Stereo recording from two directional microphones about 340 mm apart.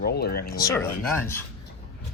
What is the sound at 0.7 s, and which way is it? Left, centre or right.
Speech, centre.